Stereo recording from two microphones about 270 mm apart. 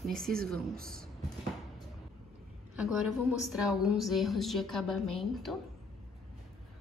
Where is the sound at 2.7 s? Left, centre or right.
Centre.